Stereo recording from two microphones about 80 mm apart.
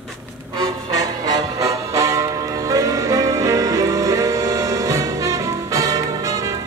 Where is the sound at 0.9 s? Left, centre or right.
Right.